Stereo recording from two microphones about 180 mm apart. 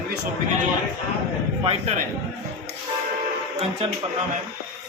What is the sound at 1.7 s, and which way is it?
Speech, 35° right (ahead or behind).